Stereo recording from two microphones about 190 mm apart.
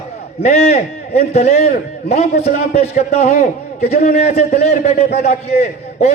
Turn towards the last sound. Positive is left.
turn(degrees=35)  # may be behind; listen again after turning